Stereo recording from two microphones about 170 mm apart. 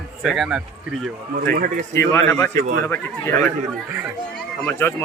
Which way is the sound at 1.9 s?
15° left (ahead or behind).